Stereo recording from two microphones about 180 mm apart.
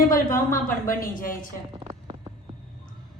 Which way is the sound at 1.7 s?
30° right (ahead or behind).